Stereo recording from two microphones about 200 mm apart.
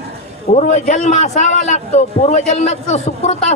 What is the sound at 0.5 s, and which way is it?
A man's voice, 40° left (ahead or behind).